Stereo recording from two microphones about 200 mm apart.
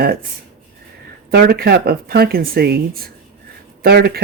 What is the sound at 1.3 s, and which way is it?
Speech, 50° right (ahead or behind).